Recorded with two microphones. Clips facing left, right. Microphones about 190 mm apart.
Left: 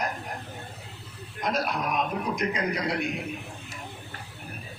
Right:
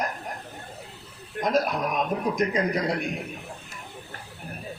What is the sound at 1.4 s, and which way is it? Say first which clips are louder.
A man's voice: right 4 dB; 45° right (ahead or behind).